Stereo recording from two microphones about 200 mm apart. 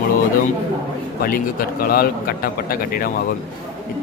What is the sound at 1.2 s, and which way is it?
A man's voice, 45° left (ahead or behind).